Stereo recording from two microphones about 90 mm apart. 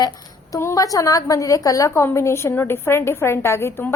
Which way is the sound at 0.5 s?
40° left (ahead or behind).